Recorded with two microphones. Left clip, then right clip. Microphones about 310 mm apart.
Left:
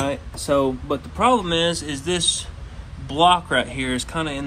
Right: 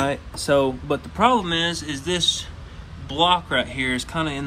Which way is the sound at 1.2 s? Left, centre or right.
Centre.